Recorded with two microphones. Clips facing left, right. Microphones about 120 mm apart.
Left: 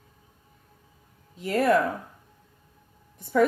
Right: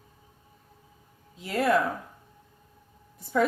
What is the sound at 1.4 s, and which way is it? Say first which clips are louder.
Speech: left 3 dB; 45° left (ahead or behind).